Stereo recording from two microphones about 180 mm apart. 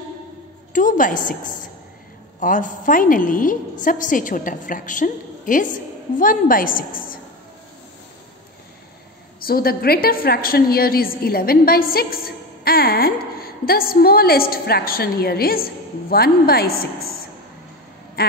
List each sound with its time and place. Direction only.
0.7 s a woman's voice: 45° left (ahead or behind)
2.4 s a woman's voice: 50° left (ahead or behind)
9.4 s a woman's voice: 55° left (ahead or behind)